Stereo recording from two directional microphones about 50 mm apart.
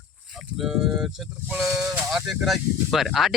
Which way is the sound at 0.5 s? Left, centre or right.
Centre.